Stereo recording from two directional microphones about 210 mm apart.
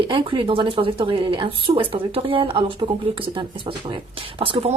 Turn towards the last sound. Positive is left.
turn(degrees=-25)  # may be behind; listen again after turning